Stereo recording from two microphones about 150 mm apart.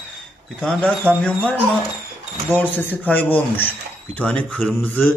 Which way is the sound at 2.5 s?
10° left (ahead or behind).